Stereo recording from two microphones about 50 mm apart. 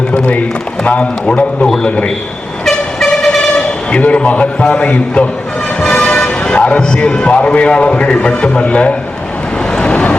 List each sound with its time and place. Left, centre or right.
0.1 s a man's voice: left
1.6 s a man's voice: centre
2.6 s vehicle: centre
3.9 s a man's voice: left
9.7 s vehicle: left